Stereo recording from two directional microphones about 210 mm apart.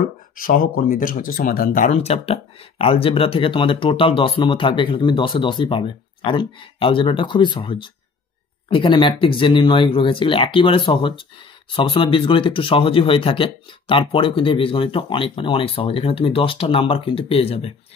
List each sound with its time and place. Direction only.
0.4 s speech: 40° left (ahead or behind)